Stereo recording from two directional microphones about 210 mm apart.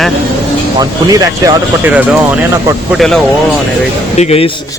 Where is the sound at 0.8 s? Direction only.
15° right (ahead or behind).